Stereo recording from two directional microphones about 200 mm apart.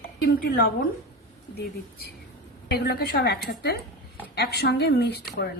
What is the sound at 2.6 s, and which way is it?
A woman's voice, 50° left (ahead or behind).